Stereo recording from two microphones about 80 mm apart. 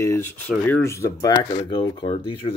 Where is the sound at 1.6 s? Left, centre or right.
Left.